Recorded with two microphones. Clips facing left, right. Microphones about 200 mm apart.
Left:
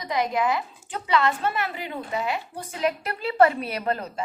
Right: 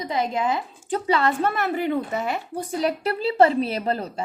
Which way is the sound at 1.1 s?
40° right (ahead or behind).